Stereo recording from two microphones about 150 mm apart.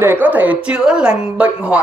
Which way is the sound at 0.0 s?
10° right (ahead or behind).